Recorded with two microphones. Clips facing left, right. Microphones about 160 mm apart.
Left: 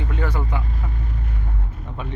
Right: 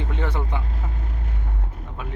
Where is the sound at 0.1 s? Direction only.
25° right (ahead or behind).